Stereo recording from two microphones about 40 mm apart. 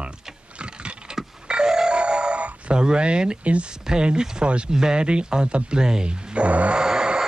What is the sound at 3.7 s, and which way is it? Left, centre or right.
Speech, centre.